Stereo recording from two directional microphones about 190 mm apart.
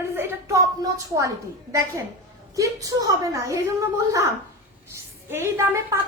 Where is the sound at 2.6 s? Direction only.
20° right (ahead or behind).